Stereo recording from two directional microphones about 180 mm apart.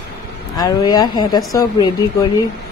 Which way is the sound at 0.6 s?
20° left (ahead or behind).